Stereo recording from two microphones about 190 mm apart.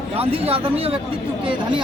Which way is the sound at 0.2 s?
30° right (ahead or behind).